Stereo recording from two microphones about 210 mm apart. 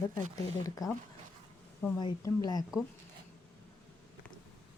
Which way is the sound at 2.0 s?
20° left (ahead or behind).